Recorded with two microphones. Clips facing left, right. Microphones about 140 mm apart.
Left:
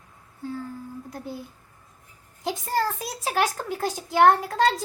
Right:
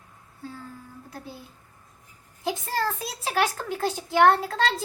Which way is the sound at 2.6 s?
15° left (ahead or behind).